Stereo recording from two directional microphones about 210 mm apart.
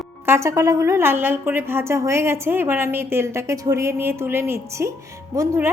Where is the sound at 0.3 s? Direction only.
15° right (ahead or behind).